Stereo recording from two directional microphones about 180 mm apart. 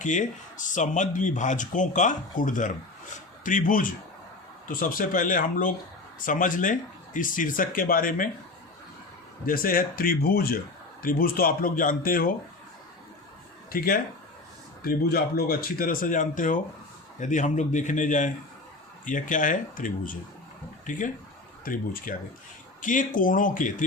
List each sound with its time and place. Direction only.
0.0 s speech: 45° left (ahead or behind)
9.5 s speech: 50° left (ahead or behind)
13.7 s speech: 55° left (ahead or behind)
21.6 s speech: 50° left (ahead or behind)